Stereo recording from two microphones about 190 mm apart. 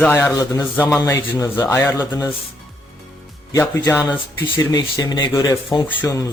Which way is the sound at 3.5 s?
15° left (ahead or behind).